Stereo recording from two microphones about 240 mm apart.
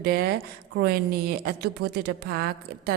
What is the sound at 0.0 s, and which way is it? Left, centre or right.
A woman's voice, right.